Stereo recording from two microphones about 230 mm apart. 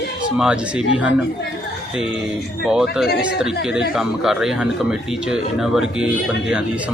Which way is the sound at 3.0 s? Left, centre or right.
Left.